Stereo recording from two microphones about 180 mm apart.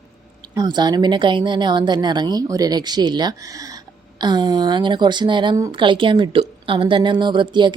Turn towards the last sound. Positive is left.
turn(degrees=-25)  # may be behind; listen again after turning